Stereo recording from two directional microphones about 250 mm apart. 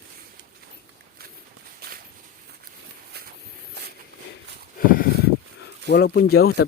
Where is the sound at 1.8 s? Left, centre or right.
Right.